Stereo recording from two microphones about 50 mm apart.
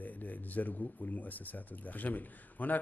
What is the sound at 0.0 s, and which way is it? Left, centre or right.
Speech, left.